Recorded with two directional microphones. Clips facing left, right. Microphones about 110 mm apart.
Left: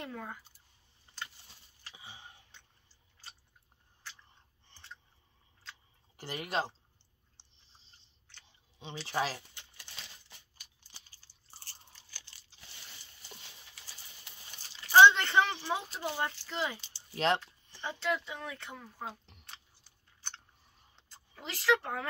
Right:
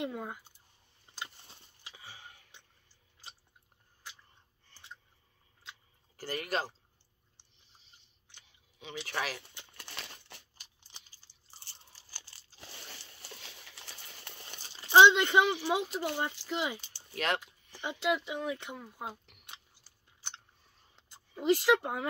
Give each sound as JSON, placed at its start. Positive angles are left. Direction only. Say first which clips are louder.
{"t": 0.0, "sound": "speech", "louder": "right 5 dB", "side_deg": -15}
{"t": 2.0, "sound": "a sound", "louder": "even", "side_deg": 20}
{"t": 6.1, "sound": "speech", "louder": "even", "side_deg": 25}
{"t": 7.4, "sound": "a sound", "louder": "left 2 dB", "side_deg": 25}
{"t": 7.7, "sound": "chewing", "louder": "even", "side_deg": 30}
{"t": 8.5, "sound": "a sound", "louder": "left 1 dB", "side_deg": 25}
{"t": 9.0, "sound": "speech", "louder": "left 3 dB", "side_deg": 30}
{"t": 9.5, "sound": "crumpling", "louder": "right 5 dB", "side_deg": -60}
{"t": 12.1, "sound": "crumpling", "louder": "right 3 dB", "side_deg": -40}
{"t": 12.6, "sound": "horse", "louder": "right 6 dB", "side_deg": -65}
{"t": 14.8, "sound": "speech", "louder": "even", "side_deg": -20}
{"t": 16.8, "sound": "a sound", "louder": "right 1 dB", "side_deg": -55}
{"t": 17.4, "sound": "speech", "louder": "right 1 dB", "side_deg": -15}
{"t": 21.1, "sound": "speech", "louder": "right 17 dB", "side_deg": -20}